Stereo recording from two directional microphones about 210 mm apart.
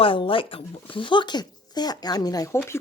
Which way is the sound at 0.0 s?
25° left (ahead or behind).